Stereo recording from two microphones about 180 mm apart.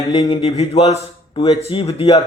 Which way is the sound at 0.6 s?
35° left (ahead or behind).